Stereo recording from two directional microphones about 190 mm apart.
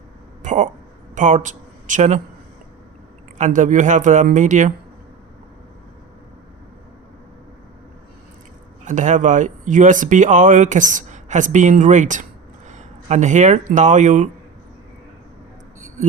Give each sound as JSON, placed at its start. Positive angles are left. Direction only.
{"t": 0.4, "sound": "a sound", "side_deg": -40}
{"t": 1.1, "sound": "speech", "side_deg": -40}
{"t": 3.3, "sound": "speech", "side_deg": -40}
{"t": 8.8, "sound": "speech", "side_deg": -40}